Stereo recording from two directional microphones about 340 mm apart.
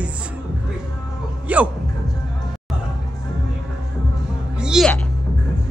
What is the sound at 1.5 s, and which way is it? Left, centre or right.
Speech, centre.